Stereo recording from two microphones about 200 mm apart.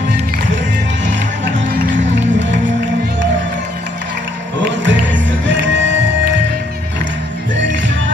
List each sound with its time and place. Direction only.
2.1 s music: 65° right (ahead or behind)
4.7 s music: 65° right (ahead or behind)